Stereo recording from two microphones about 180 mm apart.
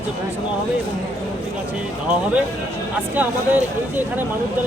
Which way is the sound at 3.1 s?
10° right (ahead or behind).